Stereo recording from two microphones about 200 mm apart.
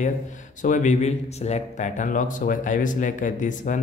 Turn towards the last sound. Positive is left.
turn(degrees=40)  # may be behind; listen again after turning